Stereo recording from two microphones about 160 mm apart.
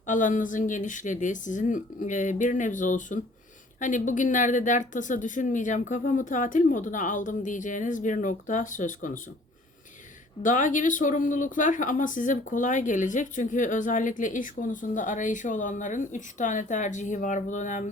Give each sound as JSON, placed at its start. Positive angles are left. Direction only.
{"t": 0.1, "sound": "speech", "side_deg": 55}
{"t": 10.4, "sound": "speech", "side_deg": 55}